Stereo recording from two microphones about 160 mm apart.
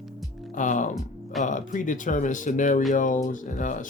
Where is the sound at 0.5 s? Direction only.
50° left (ahead or behind).